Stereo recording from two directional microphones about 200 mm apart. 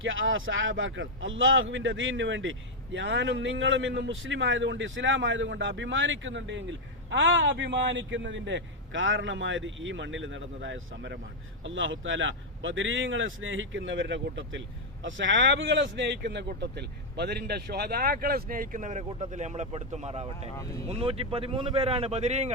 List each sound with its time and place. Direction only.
0.0 s a man's voice: 75° right (ahead or behind); by 22.5 s 35° right (ahead or behind)